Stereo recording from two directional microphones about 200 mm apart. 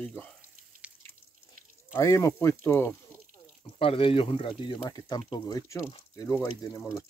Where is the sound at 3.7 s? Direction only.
30° left (ahead or behind).